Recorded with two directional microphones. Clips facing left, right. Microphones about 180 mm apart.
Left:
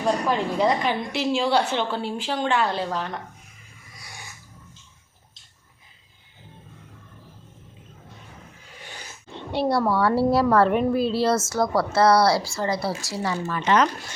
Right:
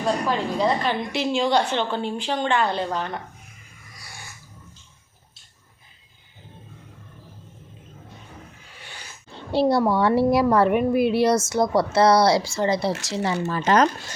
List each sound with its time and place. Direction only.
0.3 s speech: 15° left (ahead or behind)
1.1 s a woman's voice: centre (ahead or behind)
9.3 s a sound: 30° right (ahead or behind)
9.9 s speech: 20° right (ahead or behind)
13.5 s speech: 40° right (ahead or behind)